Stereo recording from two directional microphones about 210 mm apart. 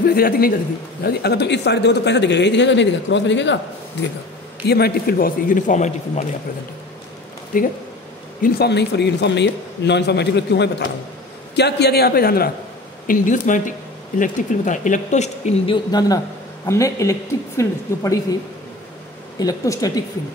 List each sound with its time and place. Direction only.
0.1 s a man's voice: 45° left (ahead or behind)
4.6 s a man's voice: 50° left (ahead or behind)
7.5 s speech: 40° left (ahead or behind)
8.4 s a man's voice: 50° left (ahead or behind); by 18.2 s 15° left (ahead or behind)
19.3 s a woman's voice: 15° left (ahead or behind)